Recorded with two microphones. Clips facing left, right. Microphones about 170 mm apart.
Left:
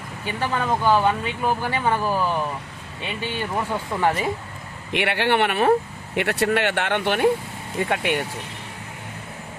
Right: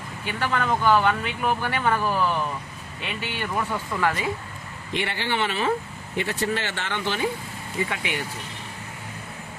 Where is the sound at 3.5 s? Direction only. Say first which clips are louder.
Left 1 dB; 20° left (ahead or behind).